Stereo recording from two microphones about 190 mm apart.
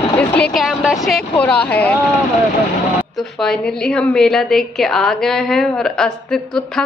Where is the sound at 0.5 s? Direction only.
Centre (ahead or behind).